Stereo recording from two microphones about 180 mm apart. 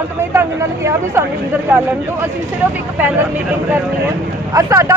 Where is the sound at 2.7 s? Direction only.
10° right (ahead or behind).